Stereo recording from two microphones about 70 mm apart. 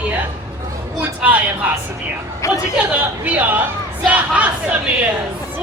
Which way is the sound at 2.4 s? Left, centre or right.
Left.